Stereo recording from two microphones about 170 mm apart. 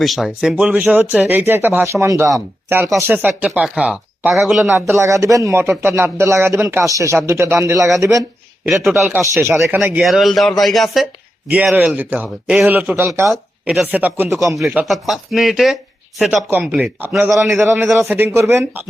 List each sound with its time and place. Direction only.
0.0 s a man's voice: centre (ahead or behind)
4.7 s a man's voice: 15° right (ahead or behind)
8.6 s speech: centre (ahead or behind)
9.2 s a man's voice: 10° right (ahead or behind)
10.0 s a man's voice: centre (ahead or behind)